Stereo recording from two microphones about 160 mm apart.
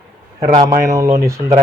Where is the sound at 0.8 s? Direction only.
20° right (ahead or behind).